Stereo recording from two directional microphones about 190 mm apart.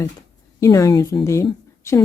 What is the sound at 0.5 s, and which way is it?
A woman's voice, 15° left (ahead or behind).